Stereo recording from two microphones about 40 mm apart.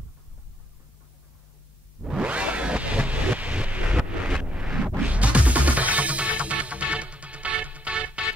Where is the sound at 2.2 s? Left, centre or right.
Right.